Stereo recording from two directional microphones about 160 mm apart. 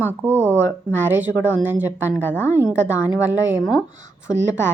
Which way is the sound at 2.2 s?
15° left (ahead or behind).